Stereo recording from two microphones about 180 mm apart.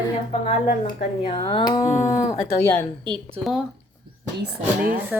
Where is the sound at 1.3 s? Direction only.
25° left (ahead or behind).